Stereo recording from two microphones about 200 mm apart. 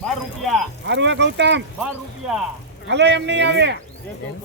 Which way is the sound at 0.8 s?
60° right (ahead or behind).